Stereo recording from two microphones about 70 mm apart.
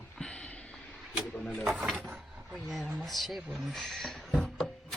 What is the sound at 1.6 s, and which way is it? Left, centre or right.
Speech, centre.